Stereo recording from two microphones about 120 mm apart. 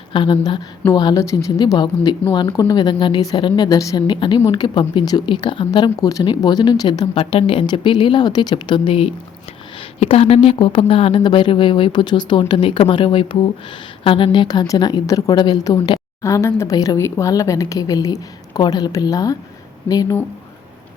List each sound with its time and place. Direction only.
0.1 s a woman's voice: 45° left (ahead or behind)
1.2 s a woman's voice: 25° left (ahead or behind)
7.1 s a woman's voice: 50° left (ahead or behind); by 20.1 s 30° left (ahead or behind)